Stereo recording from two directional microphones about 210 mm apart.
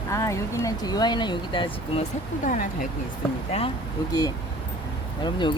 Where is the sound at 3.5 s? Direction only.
25° left (ahead or behind).